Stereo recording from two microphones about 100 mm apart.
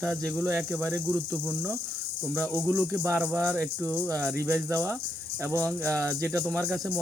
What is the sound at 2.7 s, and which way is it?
Speech, 15° right (ahead or behind).